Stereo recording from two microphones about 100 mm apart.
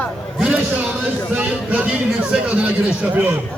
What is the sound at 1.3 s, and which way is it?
A man's voice, 15° right (ahead or behind).